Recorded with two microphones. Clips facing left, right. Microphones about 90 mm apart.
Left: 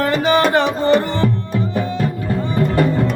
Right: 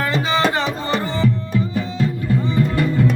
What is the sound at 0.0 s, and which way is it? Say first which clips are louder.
Music: left 4 dB; 55° left (ahead or behind).